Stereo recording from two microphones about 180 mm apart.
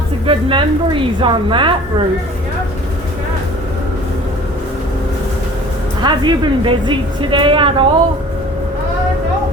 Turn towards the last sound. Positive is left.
turn(degrees=-30)  # may be behind; listen again after turning